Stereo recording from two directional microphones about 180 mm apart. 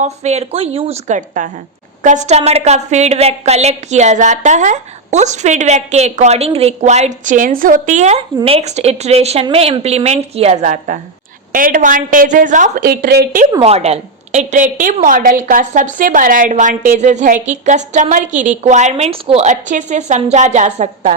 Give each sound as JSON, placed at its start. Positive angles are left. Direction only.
{"t": 0.0, "sound": "a woman's voice", "side_deg": -40}
{"t": 13.6, "sound": "a woman's voice", "side_deg": -35}